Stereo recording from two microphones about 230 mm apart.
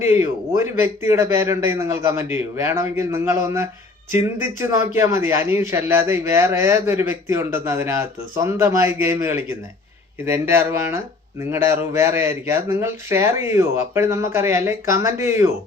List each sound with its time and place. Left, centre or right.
0.0 s speech: centre